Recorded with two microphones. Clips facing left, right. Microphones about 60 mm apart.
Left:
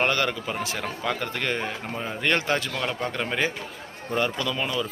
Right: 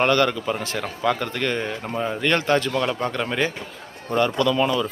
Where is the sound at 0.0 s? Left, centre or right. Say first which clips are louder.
Right 5 dB; centre.